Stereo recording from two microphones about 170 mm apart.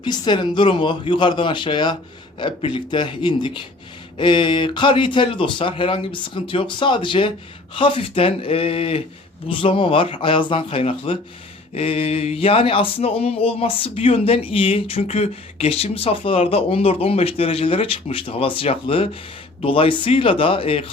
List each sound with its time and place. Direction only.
0.0 s speech: 25° left (ahead or behind)